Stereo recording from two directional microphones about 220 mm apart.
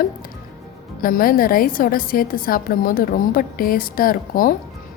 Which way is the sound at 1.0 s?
40° left (ahead or behind).